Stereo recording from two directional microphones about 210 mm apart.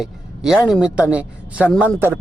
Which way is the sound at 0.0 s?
Centre (ahead or behind).